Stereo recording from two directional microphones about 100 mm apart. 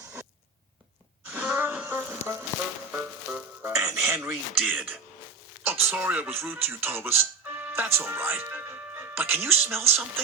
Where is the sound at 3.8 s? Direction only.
30° right (ahead or behind).